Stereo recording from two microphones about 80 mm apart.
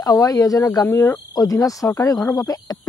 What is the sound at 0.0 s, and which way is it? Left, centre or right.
Speech, left.